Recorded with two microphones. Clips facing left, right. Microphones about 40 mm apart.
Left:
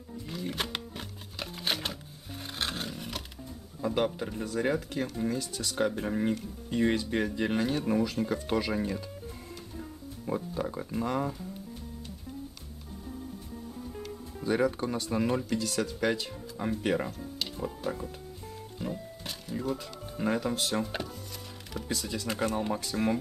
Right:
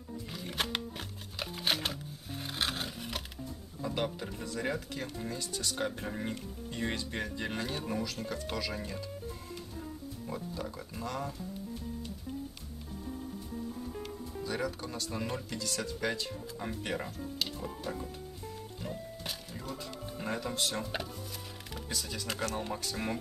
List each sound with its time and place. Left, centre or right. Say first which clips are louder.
0.3 s music: left 2 dB; centre
2.6 s a sound: left 1 dB; centre
3.8 s speech: left 6 dB; centre
10.5 s speech: left 7 dB; left
14.4 s speech: left 8 dB; left; by 18.1 s centre
18.8 s music: left 6 dB; centre
19.6 s speech: left 8 dB; centre
22.4 s speech: left 6 dB; left
22.8 s speech: left 6 dB; centre